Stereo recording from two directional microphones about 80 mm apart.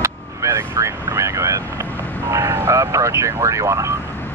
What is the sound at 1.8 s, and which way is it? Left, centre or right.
Vehicle, left.